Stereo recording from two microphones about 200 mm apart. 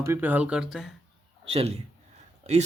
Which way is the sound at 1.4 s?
30° right (ahead or behind).